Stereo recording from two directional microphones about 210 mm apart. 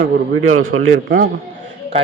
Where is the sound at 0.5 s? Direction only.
75° right (ahead or behind).